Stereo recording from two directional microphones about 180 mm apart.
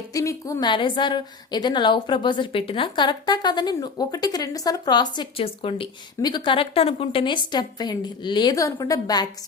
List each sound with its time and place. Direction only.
0.1 s a woman's voice: 20° left (ahead or behind)